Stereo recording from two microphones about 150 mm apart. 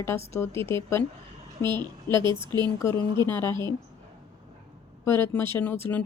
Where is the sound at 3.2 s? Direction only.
15° left (ahead or behind).